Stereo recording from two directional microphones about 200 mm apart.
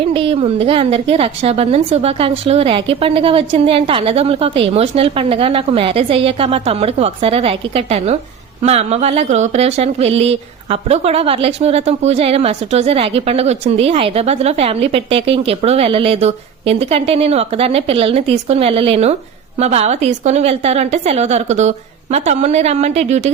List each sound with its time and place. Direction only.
0.1 s a woman's voice: 25° right (ahead or behind)